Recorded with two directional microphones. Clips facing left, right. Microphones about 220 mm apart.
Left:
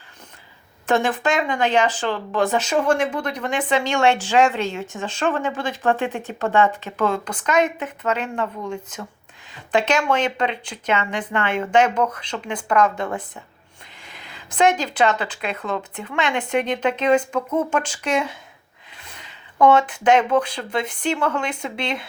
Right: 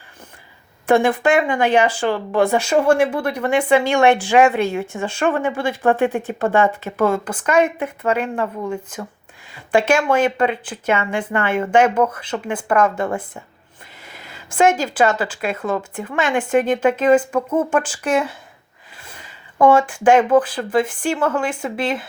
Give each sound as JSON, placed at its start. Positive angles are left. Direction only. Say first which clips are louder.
{"t": 0.9, "sound": "speech", "louder": "right 5 dB", "side_deg": -10}
{"t": 6.1, "sound": "speech", "louder": "right 2 dB", "side_deg": -50}
{"t": 6.9, "sound": "speech", "louder": "right 4 dB", "side_deg": -10}
{"t": 14.0, "sound": "a sound", "louder": "right 3 dB", "side_deg": -5}
{"t": 14.3, "sound": "speech", "louder": "right 2 dB", "side_deg": -5}
{"t": 18.9, "sound": "a sound", "louder": "right 2 dB", "side_deg": -5}
{"t": 20.1, "sound": "speech", "louder": "right 4 dB", "side_deg": -5}